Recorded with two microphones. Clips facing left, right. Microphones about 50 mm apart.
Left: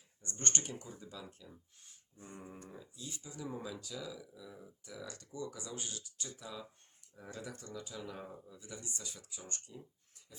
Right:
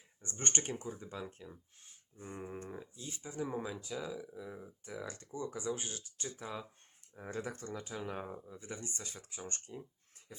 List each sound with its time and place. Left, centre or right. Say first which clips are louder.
0.2 s speech: right 1 dB; right
2.1 s speech: right 6 dB; right
10.2 s a sound: right 3 dB; right